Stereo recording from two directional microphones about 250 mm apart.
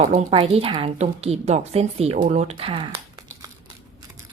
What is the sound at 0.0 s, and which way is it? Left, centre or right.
A woman's voice, right.